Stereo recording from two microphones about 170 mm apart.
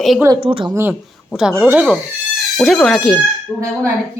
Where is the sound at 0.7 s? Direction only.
10° right (ahead or behind).